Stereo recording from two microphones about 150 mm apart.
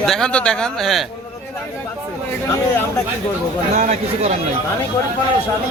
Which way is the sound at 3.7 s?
50° right (ahead or behind).